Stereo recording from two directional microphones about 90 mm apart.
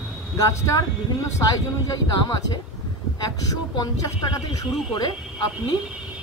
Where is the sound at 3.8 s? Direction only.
45° left (ahead or behind).